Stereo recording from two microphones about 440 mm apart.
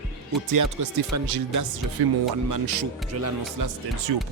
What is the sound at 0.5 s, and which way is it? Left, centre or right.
Speech, right.